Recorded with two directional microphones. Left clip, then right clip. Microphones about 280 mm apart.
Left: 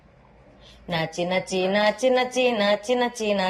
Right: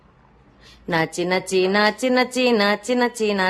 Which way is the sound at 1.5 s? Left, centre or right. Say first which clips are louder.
Right 4 dB; centre.